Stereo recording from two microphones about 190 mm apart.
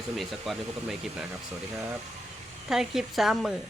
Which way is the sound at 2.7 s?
Centre (ahead or behind).